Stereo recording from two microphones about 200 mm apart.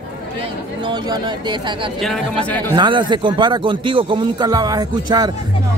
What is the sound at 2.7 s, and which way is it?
Speech, 25° right (ahead or behind).